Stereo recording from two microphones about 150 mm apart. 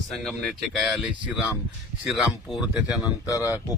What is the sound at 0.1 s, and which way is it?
Speech, centre (ahead or behind).